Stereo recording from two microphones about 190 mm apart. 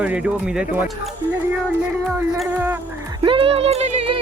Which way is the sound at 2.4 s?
10° right (ahead or behind).